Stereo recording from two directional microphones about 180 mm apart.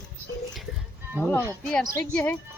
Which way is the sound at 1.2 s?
10° left (ahead or behind).